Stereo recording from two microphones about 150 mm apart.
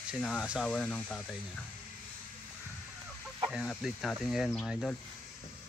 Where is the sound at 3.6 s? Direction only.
Centre (ahead or behind).